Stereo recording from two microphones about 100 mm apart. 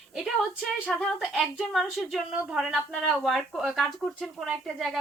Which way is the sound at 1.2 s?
Centre (ahead or behind).